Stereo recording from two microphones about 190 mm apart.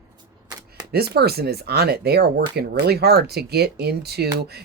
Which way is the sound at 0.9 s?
55° right (ahead or behind).